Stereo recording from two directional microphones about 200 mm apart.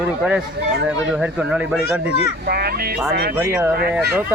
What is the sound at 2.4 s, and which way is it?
Speech, 50° right (ahead or behind).